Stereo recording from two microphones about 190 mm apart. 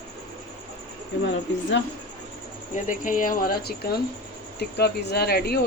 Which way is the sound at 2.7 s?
45° left (ahead or behind).